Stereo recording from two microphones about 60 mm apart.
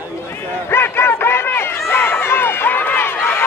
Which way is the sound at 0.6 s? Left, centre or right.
Left.